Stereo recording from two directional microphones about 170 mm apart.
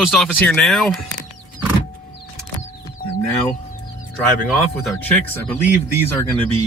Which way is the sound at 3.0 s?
55° left (ahead or behind).